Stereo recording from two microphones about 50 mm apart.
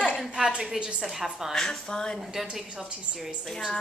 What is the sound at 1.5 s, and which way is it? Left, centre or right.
Speech, centre.